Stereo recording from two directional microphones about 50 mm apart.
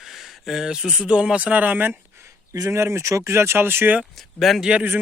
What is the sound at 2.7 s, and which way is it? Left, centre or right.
Speech, right.